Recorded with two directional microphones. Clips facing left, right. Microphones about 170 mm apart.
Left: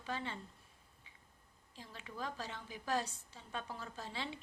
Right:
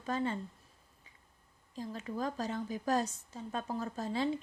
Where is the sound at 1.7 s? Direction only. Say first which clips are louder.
Right 12 dB; 40° right (ahead or behind).